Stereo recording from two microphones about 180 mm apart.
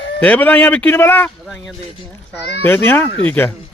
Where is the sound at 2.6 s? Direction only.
10° left (ahead or behind).